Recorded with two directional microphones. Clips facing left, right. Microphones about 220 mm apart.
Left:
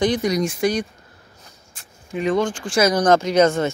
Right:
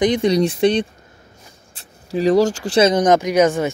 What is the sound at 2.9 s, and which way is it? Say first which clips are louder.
Speech: right 2 dB; 20° right (ahead or behind).